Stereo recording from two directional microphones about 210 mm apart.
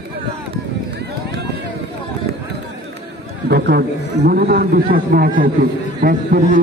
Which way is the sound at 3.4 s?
50° right (ahead or behind).